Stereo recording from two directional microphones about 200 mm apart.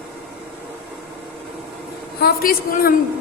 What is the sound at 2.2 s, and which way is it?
Speech, 50° left (ahead or behind).